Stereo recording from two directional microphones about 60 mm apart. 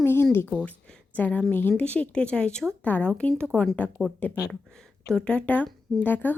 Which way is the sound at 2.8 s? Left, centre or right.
Left.